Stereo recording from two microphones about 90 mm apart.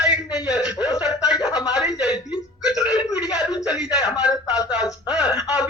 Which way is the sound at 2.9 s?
50° left (ahead or behind).